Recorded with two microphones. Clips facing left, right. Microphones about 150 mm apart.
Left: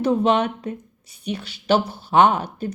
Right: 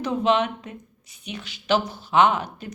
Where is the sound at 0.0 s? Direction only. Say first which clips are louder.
Left 3 dB; 35° left (ahead or behind).